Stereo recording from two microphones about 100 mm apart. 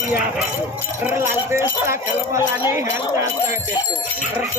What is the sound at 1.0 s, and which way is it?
Speech, 25° right (ahead or behind).